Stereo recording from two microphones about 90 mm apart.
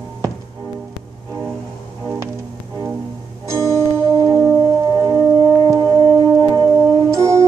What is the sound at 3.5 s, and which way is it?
Music, 35° right (ahead or behind).